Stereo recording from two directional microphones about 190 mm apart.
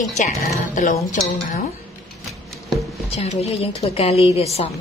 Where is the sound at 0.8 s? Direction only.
40° left (ahead or behind).